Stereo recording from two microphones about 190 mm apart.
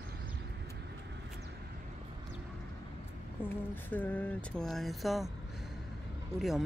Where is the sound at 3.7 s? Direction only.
10° left (ahead or behind).